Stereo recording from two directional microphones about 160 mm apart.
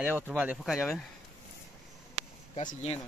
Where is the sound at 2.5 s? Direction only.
45° left (ahead or behind).